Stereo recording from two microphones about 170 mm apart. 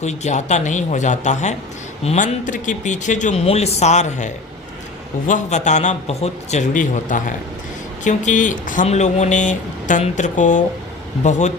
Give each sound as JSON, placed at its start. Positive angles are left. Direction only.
{"t": 0.0, "sound": "speech", "side_deg": 40}